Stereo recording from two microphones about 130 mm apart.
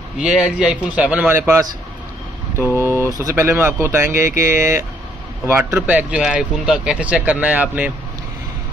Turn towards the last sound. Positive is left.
turn(degrees=-10)  # may be behind; listen again after turning